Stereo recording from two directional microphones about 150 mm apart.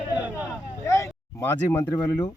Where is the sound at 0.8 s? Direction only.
20° left (ahead or behind).